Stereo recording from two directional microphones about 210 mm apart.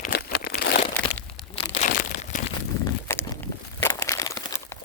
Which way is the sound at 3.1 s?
10° left (ahead or behind).